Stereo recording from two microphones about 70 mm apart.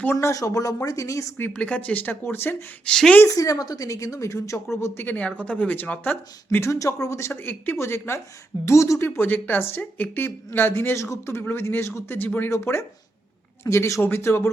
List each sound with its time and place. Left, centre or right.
0.2 s a woman's voice: left
1.5 s speech: centre
2.8 s speech: centre
3.2 s a woman's voice: left
5.0 s speech: left
6.6 s a woman's voice: left
7.4 s speech: left
12.1 s a woman's voice: left